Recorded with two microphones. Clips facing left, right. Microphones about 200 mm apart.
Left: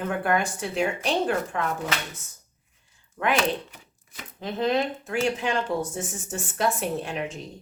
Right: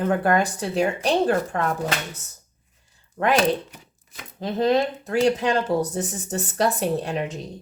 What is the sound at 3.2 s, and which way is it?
A woman's voice, 40° right (ahead or behind).